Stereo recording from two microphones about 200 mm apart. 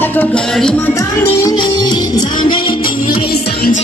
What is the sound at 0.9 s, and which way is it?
Music, 20° left (ahead or behind).